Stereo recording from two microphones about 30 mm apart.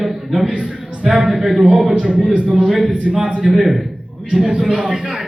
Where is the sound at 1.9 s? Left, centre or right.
Right.